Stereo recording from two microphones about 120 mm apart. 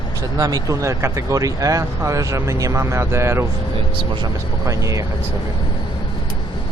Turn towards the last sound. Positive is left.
turn(degrees=-25)  # may be behind; listen again after turning